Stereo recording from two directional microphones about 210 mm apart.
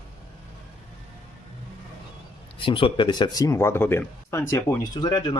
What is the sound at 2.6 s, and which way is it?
Speech, 25° left (ahead or behind).